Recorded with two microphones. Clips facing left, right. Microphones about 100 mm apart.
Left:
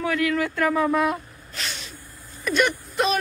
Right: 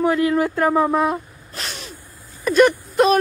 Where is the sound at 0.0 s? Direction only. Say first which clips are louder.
Right 6 dB; 30° right (ahead or behind).